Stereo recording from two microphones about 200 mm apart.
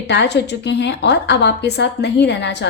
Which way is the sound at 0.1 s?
55° left (ahead or behind).